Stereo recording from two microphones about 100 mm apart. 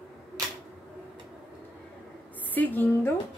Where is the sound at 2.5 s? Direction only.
20° left (ahead or behind).